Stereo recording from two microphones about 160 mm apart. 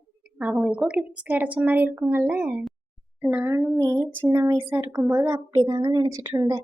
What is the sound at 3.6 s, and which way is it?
A woman's voice, 25° right (ahead or behind).